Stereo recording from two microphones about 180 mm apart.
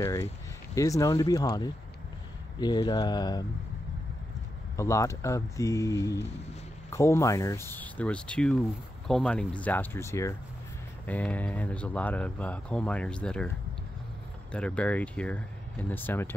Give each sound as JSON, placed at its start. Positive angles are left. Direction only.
{"t": 0.7, "sound": "speech", "side_deg": 20}
{"t": 4.7, "sound": "speech", "side_deg": 15}
{"t": 14.5, "sound": "speech", "side_deg": 5}